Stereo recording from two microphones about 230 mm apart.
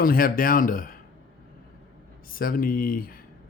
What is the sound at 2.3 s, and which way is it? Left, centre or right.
Speech, left.